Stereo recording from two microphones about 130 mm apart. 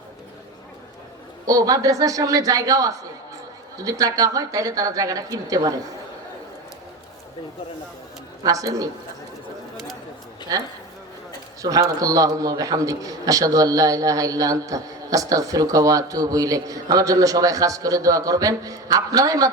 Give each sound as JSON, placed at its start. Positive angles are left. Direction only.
{"t": 1.5, "sound": "a man's voice", "side_deg": -25}
{"t": 8.4, "sound": "a man's voice", "side_deg": -25}
{"t": 11.6, "sound": "a man's voice", "side_deg": -25}